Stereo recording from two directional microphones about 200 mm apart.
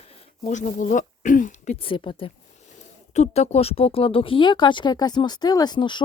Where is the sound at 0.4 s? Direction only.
35° left (ahead or behind).